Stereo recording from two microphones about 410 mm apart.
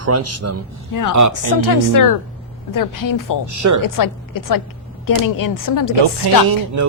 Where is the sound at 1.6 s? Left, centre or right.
Left.